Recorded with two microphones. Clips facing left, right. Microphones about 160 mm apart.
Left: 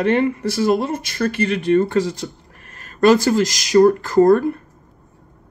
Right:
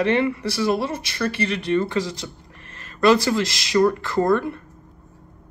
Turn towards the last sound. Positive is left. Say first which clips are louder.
# left 7 dB
turn(degrees=45)  # may be behind; listen again after turning